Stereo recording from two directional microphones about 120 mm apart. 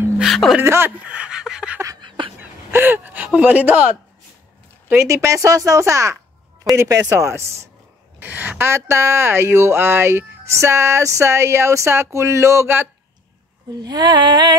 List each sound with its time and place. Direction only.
0.2 s music: centre (ahead or behind)
0.6 s speech: 20° right (ahead or behind)
2.0 s a sound: 40° right (ahead or behind)
2.7 s speech: 20° right (ahead or behind)
4.8 s speech: 25° right (ahead or behind)
13.8 s a sound: 35° right (ahead or behind)